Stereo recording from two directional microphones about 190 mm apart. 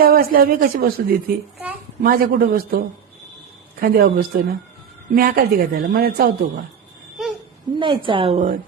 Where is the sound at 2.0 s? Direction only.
50° right (ahead or behind).